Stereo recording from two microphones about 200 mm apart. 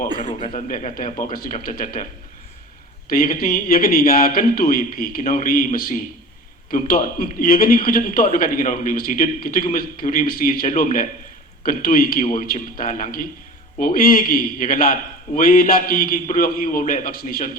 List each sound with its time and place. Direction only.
0.2 s a man's voice: 25° left (ahead or behind)
0.5 s a man's voice: 40° left (ahead or behind)
3.1 s a man's voice: 45° left (ahead or behind)